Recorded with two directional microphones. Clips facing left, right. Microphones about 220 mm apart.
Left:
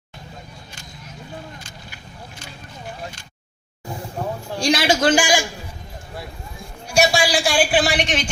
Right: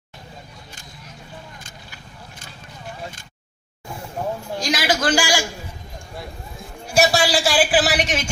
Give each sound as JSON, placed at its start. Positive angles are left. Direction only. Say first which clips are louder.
{"t": 4.6, "sound": "a man's voice", "louder": "left 4 dB", "side_deg": 30}
{"t": 6.9, "sound": "a man's voice", "louder": "even", "side_deg": 0}